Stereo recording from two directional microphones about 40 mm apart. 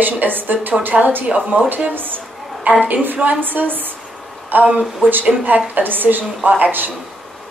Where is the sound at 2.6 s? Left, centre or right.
Right.